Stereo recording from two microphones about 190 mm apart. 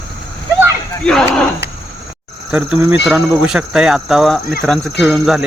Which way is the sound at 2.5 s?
5° right (ahead or behind).